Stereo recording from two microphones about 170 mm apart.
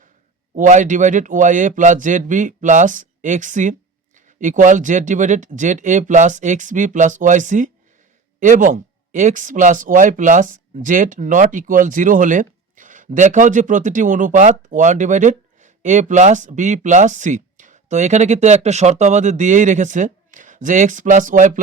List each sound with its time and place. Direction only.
0.5 s speech: 45° right (ahead or behind)